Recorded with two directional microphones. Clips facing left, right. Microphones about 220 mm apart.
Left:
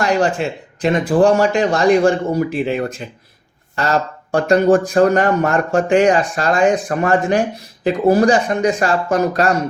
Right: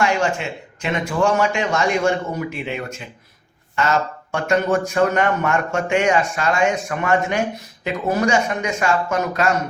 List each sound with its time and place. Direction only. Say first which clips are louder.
0.0 s speech: left 4 dB; 35° left (ahead or behind)